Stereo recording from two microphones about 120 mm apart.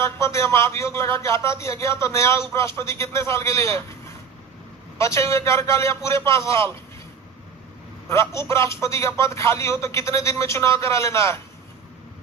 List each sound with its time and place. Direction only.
0.0 s a man's voice: 25° left (ahead or behind)
4.9 s a man's voice: 25° left (ahead or behind)
8.1 s a man's voice: 25° left (ahead or behind)